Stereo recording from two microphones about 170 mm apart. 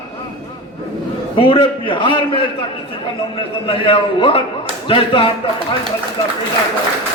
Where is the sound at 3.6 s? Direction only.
30° left (ahead or behind).